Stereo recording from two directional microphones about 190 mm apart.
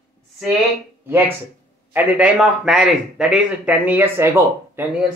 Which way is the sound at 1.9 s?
10° right (ahead or behind).